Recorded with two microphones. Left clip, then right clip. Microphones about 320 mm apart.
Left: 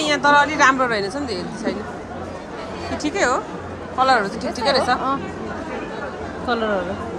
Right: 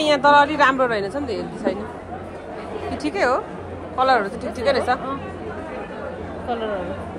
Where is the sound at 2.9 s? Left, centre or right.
Centre.